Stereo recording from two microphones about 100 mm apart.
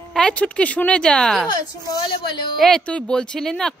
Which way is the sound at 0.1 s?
10° left (ahead or behind).